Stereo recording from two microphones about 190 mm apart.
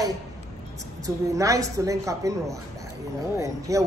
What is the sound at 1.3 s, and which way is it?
A woman's voice, 15° right (ahead or behind).